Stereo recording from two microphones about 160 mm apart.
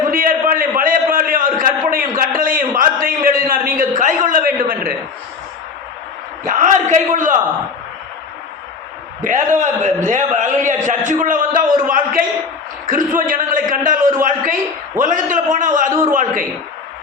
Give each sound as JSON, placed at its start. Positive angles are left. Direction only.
{"t": 0.1, "sound": "a sound", "side_deg": -60}
{"t": 6.4, "sound": "a man's voice", "side_deg": -55}
{"t": 9.6, "sound": "a man's voice", "side_deg": -50}